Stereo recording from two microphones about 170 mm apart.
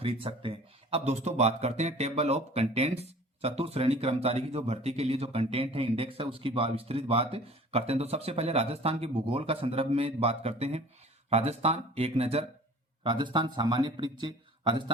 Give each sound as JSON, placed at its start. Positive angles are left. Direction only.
{"t": 0.0, "sound": "speech", "side_deg": -35}